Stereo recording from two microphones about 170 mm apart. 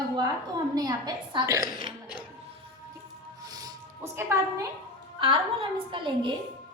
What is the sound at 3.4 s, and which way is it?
Music, 20° right (ahead or behind).